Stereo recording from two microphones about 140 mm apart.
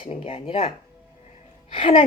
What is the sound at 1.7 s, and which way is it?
Speech, 40° left (ahead or behind).